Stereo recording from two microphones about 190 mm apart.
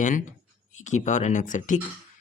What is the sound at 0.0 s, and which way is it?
Speech, 40° left (ahead or behind).